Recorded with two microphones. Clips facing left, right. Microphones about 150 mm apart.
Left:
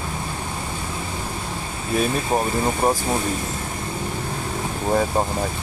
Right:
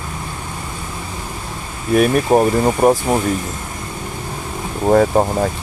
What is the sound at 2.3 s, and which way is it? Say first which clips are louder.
Speech: right 7 dB; 55° right (ahead or behind).